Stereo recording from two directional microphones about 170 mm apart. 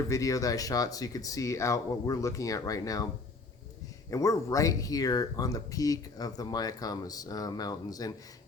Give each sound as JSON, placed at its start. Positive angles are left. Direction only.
{"t": 0.1, "sound": "speech", "side_deg": 20}
{"t": 4.1, "sound": "speech", "side_deg": 20}